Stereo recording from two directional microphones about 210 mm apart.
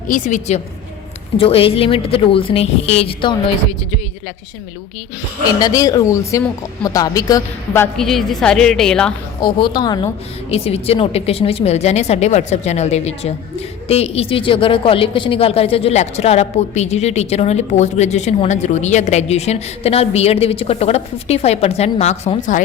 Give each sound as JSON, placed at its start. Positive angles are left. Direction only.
{"t": 0.1, "sound": "speech", "side_deg": 35}
{"t": 5.5, "sound": "speech", "side_deg": 15}
{"t": 9.4, "sound": "speech", "side_deg": 20}